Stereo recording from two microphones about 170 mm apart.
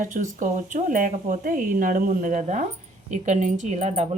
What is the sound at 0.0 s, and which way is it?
Speech, 50° right (ahead or behind).